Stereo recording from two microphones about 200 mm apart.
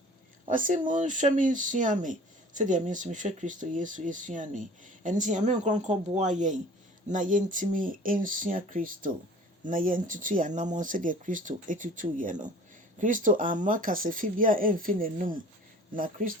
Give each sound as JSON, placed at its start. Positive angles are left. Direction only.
{"t": 0.4, "sound": "speech", "side_deg": -40}